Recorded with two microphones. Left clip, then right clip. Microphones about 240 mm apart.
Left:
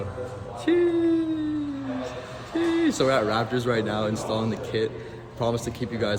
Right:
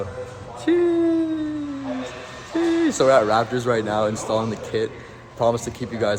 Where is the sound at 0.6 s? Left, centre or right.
Centre.